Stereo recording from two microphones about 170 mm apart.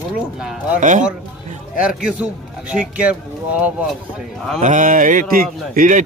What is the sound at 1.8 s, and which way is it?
A man's voice, 5° right (ahead or behind).